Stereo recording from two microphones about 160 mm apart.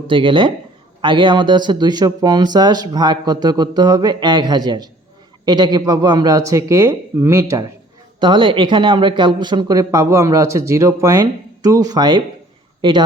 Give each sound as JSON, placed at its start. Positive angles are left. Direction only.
{"t": 0.1, "sound": "speech", "side_deg": -30}
{"t": 8.2, "sound": "speech", "side_deg": -30}